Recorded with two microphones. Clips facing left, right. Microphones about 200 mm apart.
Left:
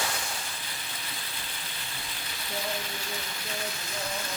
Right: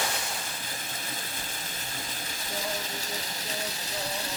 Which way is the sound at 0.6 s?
45° right (ahead or behind).